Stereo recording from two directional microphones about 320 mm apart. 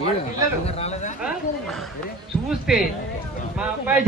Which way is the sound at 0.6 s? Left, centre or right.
Centre.